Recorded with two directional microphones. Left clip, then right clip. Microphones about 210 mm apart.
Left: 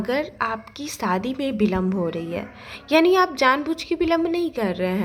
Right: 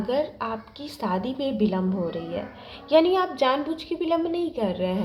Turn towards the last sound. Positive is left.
turn(degrees=30)  # may be behind; listen again after turning